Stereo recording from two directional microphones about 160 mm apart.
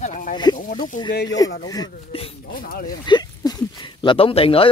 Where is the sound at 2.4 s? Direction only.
65° left (ahead or behind).